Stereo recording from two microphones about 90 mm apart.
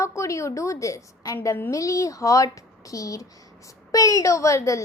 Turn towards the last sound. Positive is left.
turn(degrees=35)  # may be behind; listen again after turning